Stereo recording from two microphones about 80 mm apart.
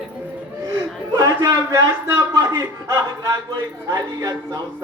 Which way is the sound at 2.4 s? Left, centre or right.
Right.